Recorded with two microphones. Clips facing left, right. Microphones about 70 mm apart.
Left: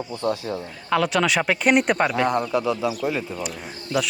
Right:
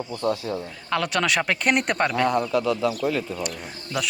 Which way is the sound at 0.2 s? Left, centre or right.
Left.